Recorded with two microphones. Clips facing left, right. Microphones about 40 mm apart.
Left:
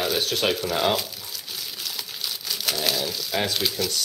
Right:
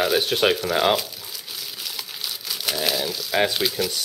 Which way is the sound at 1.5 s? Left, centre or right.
Centre.